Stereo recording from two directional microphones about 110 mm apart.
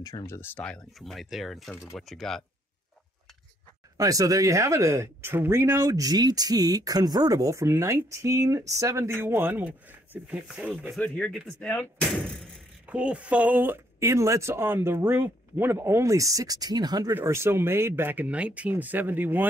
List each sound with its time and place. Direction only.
0.0 s speech: 35° left (ahead or behind)
0.6 s speech: 5° left (ahead or behind)
4.0 s speech: 30° right (ahead or behind); by 11.0 s 10° right (ahead or behind)
11.0 s speech: 10° left (ahead or behind)
12.8 s speech: 10° right (ahead or behind); by 17.1 s 40° right (ahead or behind)
17.1 s speech: 25° right (ahead or behind)